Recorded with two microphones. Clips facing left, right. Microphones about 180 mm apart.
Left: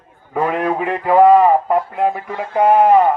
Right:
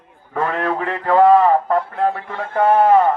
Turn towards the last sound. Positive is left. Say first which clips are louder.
# left 2 dB
turn(degrees=15)  # may be behind; listen again after turning